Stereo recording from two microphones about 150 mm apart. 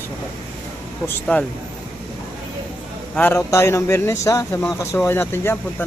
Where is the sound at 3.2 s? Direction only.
15° left (ahead or behind).